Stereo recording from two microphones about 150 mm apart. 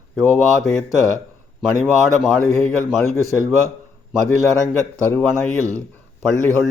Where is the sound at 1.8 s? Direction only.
5° right (ahead or behind).